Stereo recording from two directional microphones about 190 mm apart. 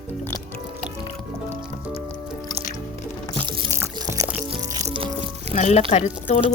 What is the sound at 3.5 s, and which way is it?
Music, 15° right (ahead or behind).